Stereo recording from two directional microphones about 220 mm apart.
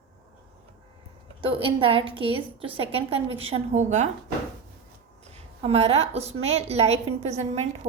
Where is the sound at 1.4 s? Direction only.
25° right (ahead or behind).